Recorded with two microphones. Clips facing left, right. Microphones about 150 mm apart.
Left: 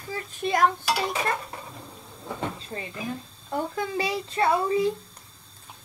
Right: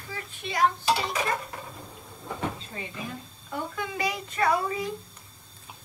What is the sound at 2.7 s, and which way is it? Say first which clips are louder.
A woman's voice: left 4 dB; 35° left (ahead or behind).